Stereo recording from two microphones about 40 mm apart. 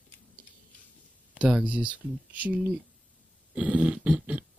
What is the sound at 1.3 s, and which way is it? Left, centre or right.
Speech, right.